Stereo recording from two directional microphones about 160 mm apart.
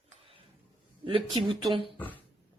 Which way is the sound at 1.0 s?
30° right (ahead or behind).